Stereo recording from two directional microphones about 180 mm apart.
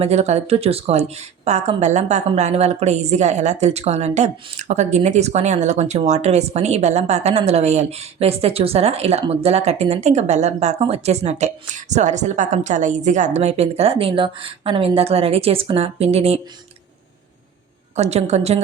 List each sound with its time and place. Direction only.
0.0 s speech: 35° right (ahead or behind)
17.9 s speech: 35° right (ahead or behind)